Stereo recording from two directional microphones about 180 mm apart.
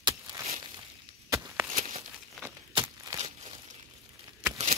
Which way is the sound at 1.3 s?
15° right (ahead or behind).